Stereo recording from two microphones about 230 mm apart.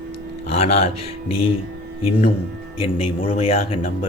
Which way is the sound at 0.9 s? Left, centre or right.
Left.